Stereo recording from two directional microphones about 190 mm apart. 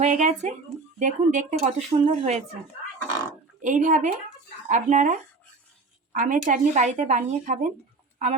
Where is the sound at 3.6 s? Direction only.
40° right (ahead or behind).